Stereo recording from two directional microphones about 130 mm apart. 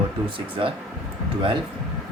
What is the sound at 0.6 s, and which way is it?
Speech, 45° right (ahead or behind).